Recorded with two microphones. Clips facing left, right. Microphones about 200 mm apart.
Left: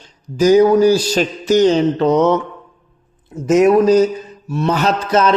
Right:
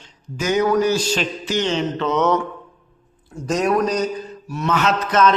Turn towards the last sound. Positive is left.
turn(degrees=30)  # may be behind; listen again after turning